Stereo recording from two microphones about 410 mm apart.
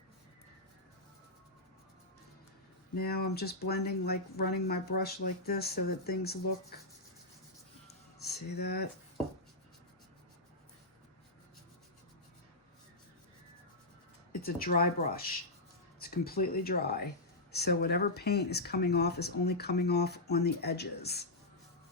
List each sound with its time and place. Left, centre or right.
2.9 s speech: left
8.5 s speech: left
14.4 s speech: left